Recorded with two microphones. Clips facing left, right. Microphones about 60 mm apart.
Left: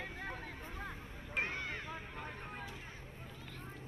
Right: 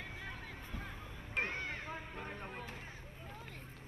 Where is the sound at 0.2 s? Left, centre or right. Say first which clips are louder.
Left 3 dB; left.